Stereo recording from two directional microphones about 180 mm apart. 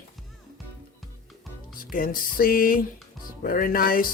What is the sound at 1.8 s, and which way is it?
Speech, 50° left (ahead or behind).